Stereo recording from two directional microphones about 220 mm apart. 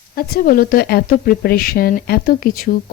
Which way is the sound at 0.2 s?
40° left (ahead or behind).